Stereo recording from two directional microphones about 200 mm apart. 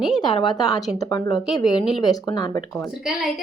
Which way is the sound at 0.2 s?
20° left (ahead or behind).